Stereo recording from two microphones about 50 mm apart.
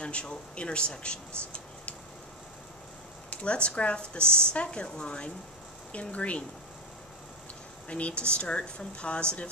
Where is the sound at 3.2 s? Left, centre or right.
Left.